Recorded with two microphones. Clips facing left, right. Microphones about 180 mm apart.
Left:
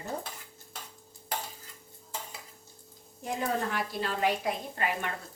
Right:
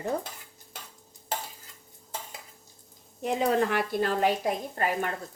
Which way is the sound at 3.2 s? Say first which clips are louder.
Right 6 dB; 75° right (ahead or behind).